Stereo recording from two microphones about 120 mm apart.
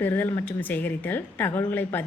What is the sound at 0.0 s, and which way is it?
A woman's voice, 15° left (ahead or behind).